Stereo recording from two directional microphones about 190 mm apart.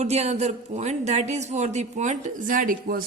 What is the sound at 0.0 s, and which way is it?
Speech, 35° right (ahead or behind).